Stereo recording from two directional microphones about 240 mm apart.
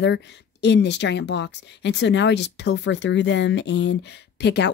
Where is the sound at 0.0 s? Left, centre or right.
Left.